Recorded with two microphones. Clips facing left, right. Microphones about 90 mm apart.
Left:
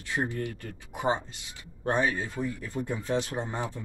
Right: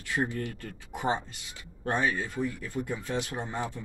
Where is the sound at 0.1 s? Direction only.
20° left (ahead or behind).